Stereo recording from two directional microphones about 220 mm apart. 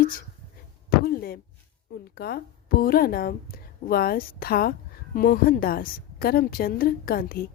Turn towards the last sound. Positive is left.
turn(degrees=40)  # may be behind; listen again after turning